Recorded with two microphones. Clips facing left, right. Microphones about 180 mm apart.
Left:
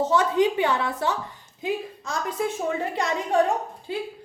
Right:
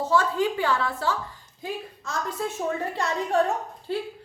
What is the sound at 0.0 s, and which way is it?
A woman's voice, 20° left (ahead or behind).